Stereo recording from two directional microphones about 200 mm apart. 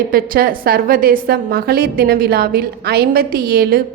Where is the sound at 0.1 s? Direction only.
45° right (ahead or behind).